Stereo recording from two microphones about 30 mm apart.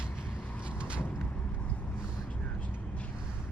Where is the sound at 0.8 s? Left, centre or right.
Right.